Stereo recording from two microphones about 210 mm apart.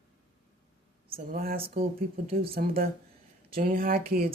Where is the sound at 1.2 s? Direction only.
45° right (ahead or behind).